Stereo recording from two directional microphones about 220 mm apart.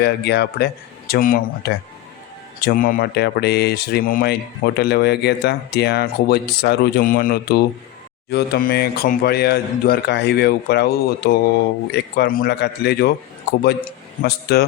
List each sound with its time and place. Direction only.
0.0 s speech: 50° left (ahead or behind)
14.2 s speech: 45° left (ahead or behind)